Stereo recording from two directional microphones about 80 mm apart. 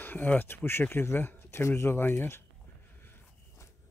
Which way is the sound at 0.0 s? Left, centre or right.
Left.